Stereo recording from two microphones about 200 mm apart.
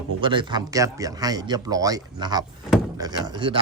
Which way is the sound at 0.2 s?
25° right (ahead or behind).